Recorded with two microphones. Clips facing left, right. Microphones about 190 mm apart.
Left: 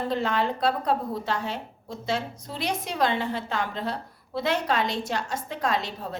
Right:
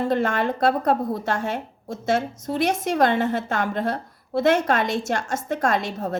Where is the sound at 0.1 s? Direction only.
50° right (ahead or behind).